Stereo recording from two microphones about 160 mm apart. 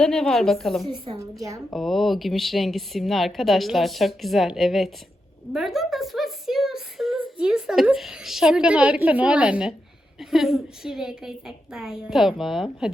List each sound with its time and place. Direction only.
0.0 s a woman's voice: 5° left (ahead or behind)
0.9 s a woman's voice: 35° right (ahead or behind)
1.2 s a woman's voice: 20° right (ahead or behind)
1.7 s a woman's voice: centre (ahead or behind)